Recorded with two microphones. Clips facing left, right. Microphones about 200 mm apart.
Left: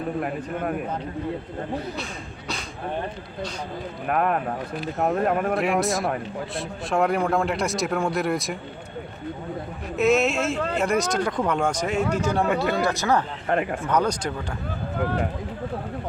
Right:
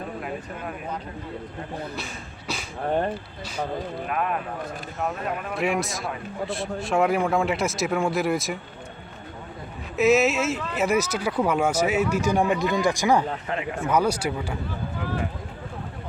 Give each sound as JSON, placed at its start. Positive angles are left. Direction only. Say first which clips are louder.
{"t": 0.2, "sound": "speech", "louder": "left 5 dB", "side_deg": 55}
{"t": 4.1, "sound": "speech", "louder": "left 6 dB", "side_deg": 50}
{"t": 5.5, "sound": "a man's voice", "louder": "left 3 dB", "side_deg": 0}
{"t": 10.0, "sound": "a man's voice", "louder": "right 1 dB", "side_deg": -5}
{"t": 12.5, "sound": "speech", "louder": "left 1 dB", "side_deg": 60}
{"t": 12.7, "sound": "speech", "louder": "right 1 dB", "side_deg": -15}
{"t": 13.5, "sound": "speech", "louder": "left 5 dB", "side_deg": 55}
{"t": 13.8, "sound": "speech", "louder": "right 1 dB", "side_deg": -10}
{"t": 14.9, "sound": "speech", "louder": "left 5 dB", "side_deg": 55}